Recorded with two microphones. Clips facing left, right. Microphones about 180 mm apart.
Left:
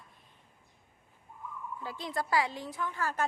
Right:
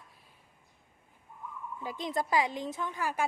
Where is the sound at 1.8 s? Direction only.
20° right (ahead or behind).